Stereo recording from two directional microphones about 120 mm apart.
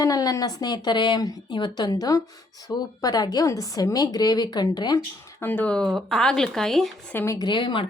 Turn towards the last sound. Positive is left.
turn(degrees=45)  # may be behind; listen again after turning